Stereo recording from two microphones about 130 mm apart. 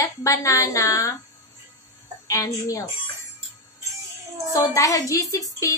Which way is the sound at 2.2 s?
25° left (ahead or behind).